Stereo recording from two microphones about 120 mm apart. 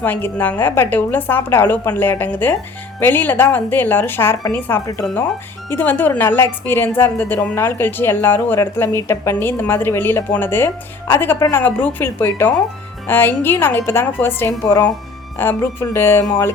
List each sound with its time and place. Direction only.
0.0 s a woman's voice: 15° left (ahead or behind)
14.6 s speech: 30° left (ahead or behind)
15.4 s speech: 20° left (ahead or behind)